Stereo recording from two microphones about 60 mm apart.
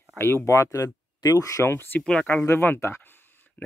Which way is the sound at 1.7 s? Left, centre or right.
Left.